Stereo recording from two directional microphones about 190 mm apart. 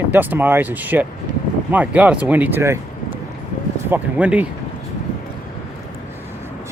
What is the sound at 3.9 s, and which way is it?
Speech, 10° right (ahead or behind).